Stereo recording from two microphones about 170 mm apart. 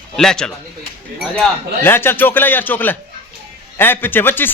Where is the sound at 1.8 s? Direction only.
15° left (ahead or behind).